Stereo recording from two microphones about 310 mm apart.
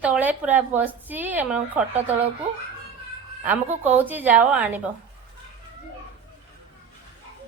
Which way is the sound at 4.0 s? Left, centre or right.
Centre.